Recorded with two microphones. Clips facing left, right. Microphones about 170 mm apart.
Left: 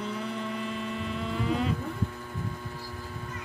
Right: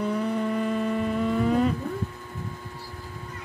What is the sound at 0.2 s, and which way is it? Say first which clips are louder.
Vehicle: right 8 dB; 50° right (ahead or behind).